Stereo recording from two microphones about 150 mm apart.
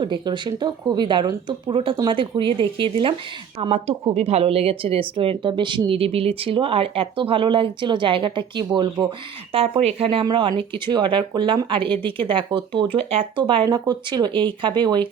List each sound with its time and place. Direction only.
0.0 s speech: 30° right (ahead or behind)
9.5 s speech: 40° right (ahead or behind)